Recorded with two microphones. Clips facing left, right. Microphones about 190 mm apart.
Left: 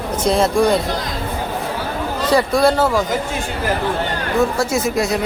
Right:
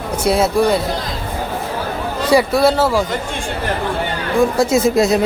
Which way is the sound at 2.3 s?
5° right (ahead or behind).